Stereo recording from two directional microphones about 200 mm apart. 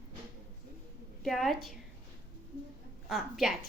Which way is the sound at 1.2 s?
Centre (ahead or behind).